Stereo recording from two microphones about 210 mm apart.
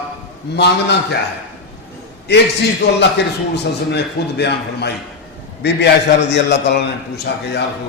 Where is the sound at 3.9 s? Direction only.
50° left (ahead or behind).